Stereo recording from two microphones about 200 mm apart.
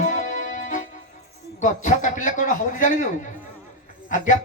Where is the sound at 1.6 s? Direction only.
40° left (ahead or behind).